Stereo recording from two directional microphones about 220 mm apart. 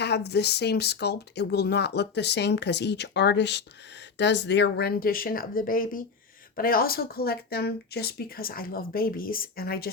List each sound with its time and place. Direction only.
0.0 s a woman's voice: 50° left (ahead or behind)